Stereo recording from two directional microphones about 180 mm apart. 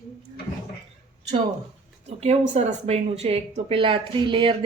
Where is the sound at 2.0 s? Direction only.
40° right (ahead or behind).